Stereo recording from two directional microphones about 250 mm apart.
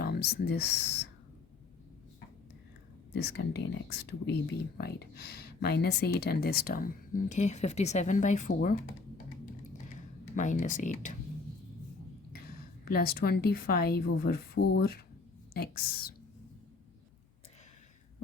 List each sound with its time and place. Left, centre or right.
0.0 s speech: left
3.1 s speech: left
10.3 s speech: left
12.8 s speech: left